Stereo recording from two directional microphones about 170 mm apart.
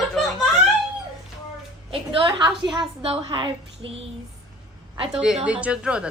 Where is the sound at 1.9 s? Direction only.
30° right (ahead or behind).